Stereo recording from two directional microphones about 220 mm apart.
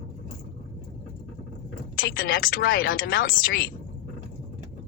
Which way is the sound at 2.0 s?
40° left (ahead or behind).